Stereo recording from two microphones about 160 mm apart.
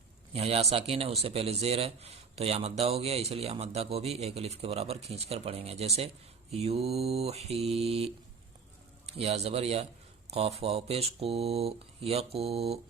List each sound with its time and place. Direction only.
0.3 s a man's voice: 40° right (ahead or behind)